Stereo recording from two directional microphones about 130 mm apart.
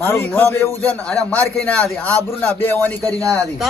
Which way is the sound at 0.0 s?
15° left (ahead or behind).